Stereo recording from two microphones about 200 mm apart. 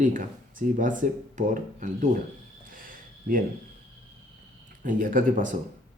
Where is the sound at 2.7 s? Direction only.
45° right (ahead or behind).